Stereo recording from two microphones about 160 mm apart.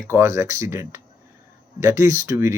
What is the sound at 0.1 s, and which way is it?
Speech, 20° right (ahead or behind).